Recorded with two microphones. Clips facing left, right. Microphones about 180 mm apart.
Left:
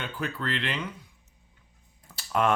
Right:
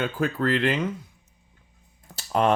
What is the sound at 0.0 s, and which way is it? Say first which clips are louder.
Speech: right 8 dB; 45° right (ahead or behind).